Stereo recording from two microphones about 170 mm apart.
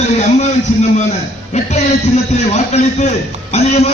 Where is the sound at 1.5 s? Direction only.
40° left (ahead or behind).